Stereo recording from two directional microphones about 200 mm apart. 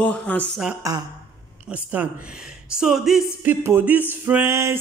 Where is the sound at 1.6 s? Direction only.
5° right (ahead or behind).